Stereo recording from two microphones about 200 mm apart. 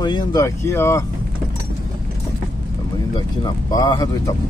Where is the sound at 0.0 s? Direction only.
20° left (ahead or behind).